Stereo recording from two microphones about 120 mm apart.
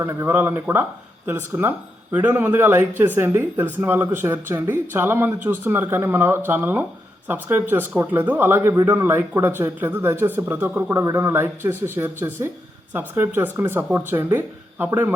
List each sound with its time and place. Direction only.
0.0 s a man's voice: 20° right (ahead or behind)